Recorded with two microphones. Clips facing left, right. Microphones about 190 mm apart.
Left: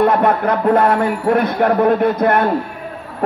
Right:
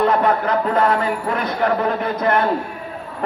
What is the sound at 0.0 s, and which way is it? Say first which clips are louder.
Speech: left 3 dB; 55° left (ahead or behind).